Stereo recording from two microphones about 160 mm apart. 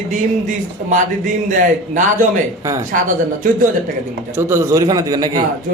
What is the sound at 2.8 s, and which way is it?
Speech, 55° right (ahead or behind).